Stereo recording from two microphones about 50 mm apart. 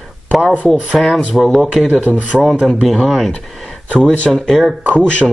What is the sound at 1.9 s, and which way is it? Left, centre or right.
Speech, right.